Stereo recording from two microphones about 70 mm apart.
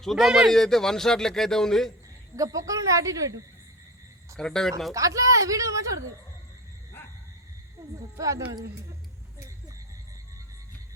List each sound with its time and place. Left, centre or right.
0.0 s a man's voice: centre
2.3 s speech: right
4.4 s speech: centre
4.9 s speech: right
7.8 s speech: right